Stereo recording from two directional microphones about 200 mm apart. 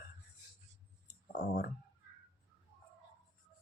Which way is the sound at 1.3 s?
45° left (ahead or behind).